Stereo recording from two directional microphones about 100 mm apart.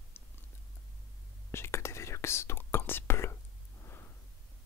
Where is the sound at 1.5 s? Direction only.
25° left (ahead or behind).